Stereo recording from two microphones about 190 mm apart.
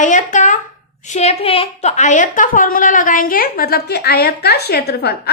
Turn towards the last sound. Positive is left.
turn(degrees=55)  # may be behind; listen again after turning